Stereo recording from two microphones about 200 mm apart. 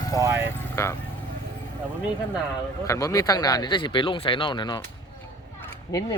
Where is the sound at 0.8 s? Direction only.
15° left (ahead or behind).